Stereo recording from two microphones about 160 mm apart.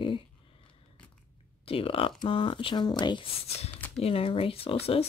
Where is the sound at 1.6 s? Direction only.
35° left (ahead or behind).